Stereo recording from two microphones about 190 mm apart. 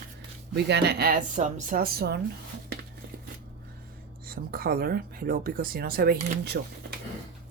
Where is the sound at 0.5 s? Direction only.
60° right (ahead or behind).